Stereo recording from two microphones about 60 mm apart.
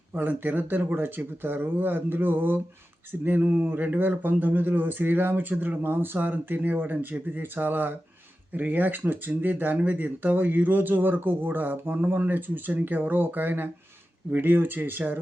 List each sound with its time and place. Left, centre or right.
0.2 s speech: right